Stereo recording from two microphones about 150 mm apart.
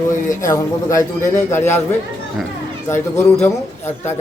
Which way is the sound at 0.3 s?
20° left (ahead or behind).